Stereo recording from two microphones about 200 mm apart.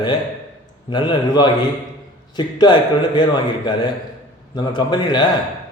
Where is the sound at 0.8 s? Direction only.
20° left (ahead or behind).